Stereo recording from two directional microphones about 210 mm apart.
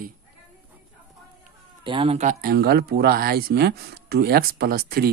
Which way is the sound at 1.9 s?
25° right (ahead or behind).